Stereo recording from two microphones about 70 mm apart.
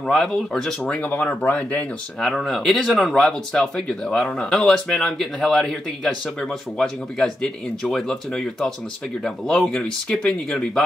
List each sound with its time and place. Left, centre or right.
0.0 s a man's voice: centre
2.1 s a man's voice: centre